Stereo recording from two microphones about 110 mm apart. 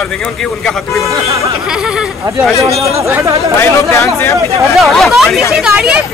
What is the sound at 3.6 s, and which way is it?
Speech, 30° left (ahead or behind).